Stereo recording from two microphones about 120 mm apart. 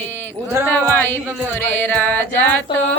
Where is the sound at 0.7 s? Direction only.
15° left (ahead or behind).